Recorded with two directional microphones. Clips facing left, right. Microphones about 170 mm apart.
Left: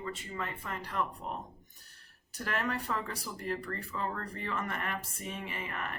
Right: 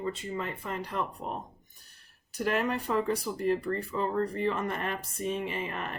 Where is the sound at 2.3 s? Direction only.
20° right (ahead or behind).